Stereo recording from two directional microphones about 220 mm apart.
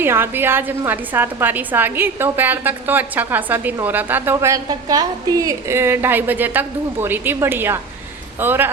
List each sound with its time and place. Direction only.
0.0 s a woman's voice: 10° right (ahead or behind)